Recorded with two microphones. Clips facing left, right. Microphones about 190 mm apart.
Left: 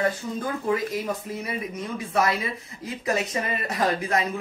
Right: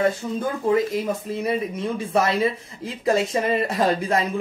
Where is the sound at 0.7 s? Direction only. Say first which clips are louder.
Right 6 dB; 25° right (ahead or behind).